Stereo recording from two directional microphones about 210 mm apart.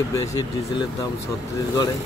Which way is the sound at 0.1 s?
15° left (ahead or behind).